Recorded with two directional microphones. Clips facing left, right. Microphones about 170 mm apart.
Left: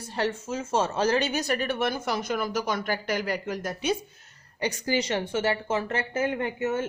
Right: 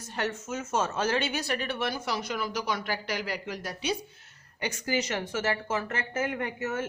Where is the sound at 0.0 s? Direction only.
30° left (ahead or behind); by 3.9 s 50° left (ahead or behind).